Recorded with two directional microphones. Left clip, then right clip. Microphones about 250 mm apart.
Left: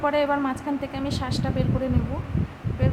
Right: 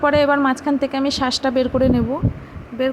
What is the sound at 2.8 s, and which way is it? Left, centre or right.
Speech, right.